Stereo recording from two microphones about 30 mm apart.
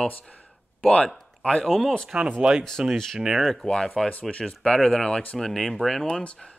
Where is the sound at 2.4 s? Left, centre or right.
Centre.